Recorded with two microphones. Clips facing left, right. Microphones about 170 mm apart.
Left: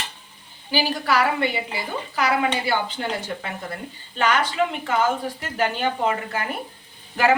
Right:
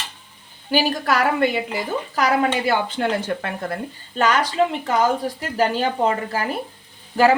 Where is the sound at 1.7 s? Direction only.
40° right (ahead or behind).